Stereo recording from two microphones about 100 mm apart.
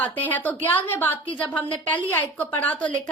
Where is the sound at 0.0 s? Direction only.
15° left (ahead or behind).